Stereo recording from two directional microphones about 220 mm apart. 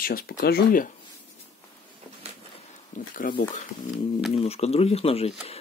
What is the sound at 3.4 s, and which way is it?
Speech, 35° left (ahead or behind).